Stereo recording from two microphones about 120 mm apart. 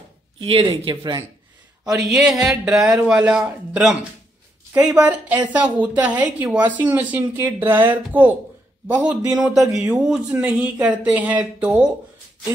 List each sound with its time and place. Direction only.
0.4 s speech: 45° right (ahead or behind)
0.7 s speech: 35° right (ahead or behind)
1.9 s speech: 5° right (ahead or behind)